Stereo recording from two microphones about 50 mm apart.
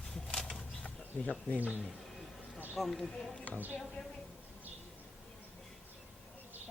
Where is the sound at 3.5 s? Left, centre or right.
Left.